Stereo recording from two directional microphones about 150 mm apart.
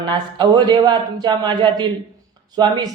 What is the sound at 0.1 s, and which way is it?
A man's voice, 30° right (ahead or behind).